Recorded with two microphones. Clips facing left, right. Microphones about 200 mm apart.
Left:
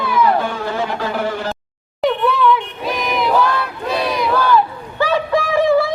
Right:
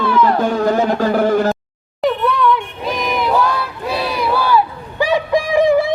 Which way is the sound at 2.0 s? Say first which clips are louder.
Even; centre (ahead or behind).